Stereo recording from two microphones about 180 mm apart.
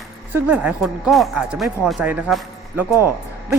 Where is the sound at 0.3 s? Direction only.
10° right (ahead or behind).